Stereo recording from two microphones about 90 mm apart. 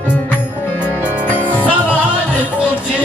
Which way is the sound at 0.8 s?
20° left (ahead or behind).